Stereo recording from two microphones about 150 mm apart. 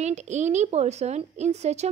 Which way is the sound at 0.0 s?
50° right (ahead or behind).